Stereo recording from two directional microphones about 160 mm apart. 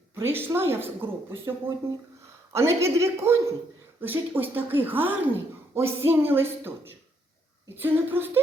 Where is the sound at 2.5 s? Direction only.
15° right (ahead or behind).